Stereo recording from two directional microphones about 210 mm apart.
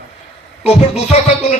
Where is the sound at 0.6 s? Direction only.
30° left (ahead or behind).